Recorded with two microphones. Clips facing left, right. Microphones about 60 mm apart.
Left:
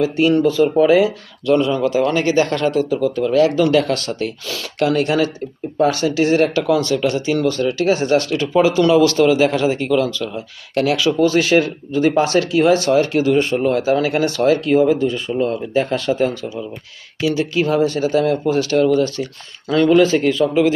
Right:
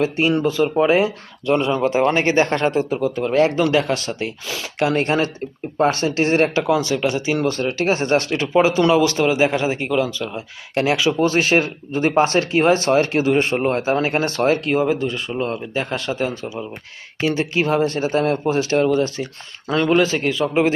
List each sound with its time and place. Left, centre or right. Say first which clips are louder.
0.3 s speech: left 4 dB; centre
0.6 s speech: left 3 dB; right
3.7 s speech: left 3 dB; right
4.9 s speech: left 2 dB; right; by 7.4 s centre
7.4 s speech: left 4 dB; right
15.7 s speech: left 6 dB; centre
16.3 s speech: left 2 dB; right
20.0 s speech: left 5 dB; centre
20.4 s speech: even; right